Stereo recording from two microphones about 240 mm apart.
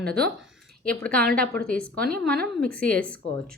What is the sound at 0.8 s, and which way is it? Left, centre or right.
A woman's voice, centre.